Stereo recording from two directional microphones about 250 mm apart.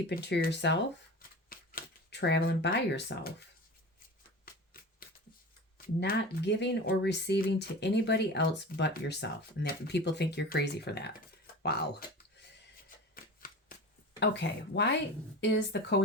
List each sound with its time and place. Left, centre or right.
0.1 s speech: left
1.5 s shuffling cards: left
4.4 s shuffling cards: left
5.7 s speech: left
13.1 s shuffling cards: left
14.2 s speech: left